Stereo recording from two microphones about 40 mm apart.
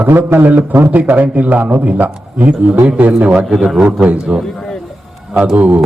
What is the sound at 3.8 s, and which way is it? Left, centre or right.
Speech, right.